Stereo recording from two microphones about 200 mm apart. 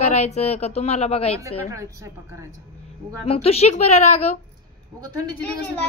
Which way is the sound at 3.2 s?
30° left (ahead or behind).